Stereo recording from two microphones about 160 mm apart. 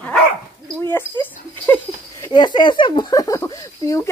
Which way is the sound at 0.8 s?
15° left (ahead or behind).